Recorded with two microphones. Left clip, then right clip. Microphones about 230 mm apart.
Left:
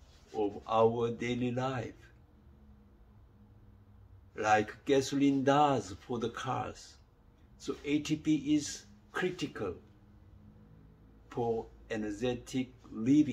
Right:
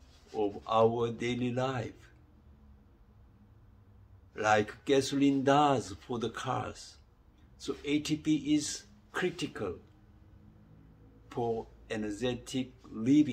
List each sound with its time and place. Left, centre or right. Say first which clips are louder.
0.4 s speech: right 1 dB; centre
4.4 s speech: right 1 dB; centre
11.3 s speech: even; centre